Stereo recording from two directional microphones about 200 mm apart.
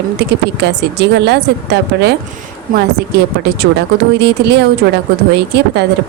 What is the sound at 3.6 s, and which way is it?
Speech, 55° right (ahead or behind).